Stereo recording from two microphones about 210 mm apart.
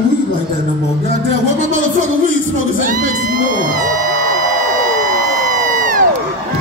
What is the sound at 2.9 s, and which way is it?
Music, 40° right (ahead or behind).